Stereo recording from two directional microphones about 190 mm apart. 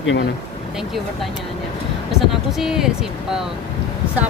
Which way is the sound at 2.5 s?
Centre (ahead or behind).